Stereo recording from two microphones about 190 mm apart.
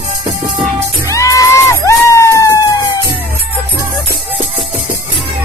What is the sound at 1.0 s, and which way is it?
Music, 15° left (ahead or behind).